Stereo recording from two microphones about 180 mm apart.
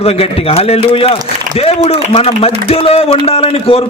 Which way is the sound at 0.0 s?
35° left (ahead or behind).